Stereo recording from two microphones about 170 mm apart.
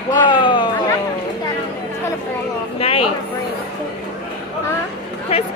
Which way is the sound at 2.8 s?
35° left (ahead or behind).